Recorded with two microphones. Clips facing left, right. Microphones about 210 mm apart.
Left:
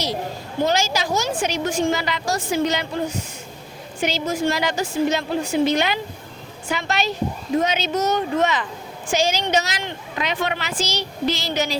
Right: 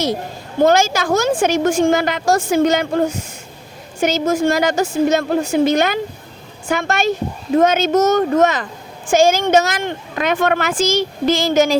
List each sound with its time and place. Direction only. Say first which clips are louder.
0.6 s a woman's voice: right 7 dB; 50° right (ahead or behind)